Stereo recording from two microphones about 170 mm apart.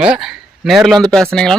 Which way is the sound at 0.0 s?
5° right (ahead or behind).